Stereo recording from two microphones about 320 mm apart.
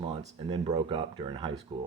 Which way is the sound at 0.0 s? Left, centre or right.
Centre.